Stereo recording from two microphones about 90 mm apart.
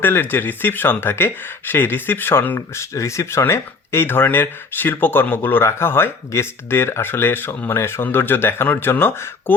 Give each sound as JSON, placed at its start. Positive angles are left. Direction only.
{"t": 0.0, "sound": "speech", "side_deg": 25}
{"t": 2.6, "sound": "speech", "side_deg": 35}